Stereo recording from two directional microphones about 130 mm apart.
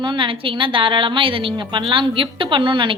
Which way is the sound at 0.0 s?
40° right (ahead or behind).